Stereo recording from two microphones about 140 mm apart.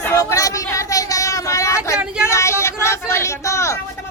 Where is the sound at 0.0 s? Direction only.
20° left (ahead or behind).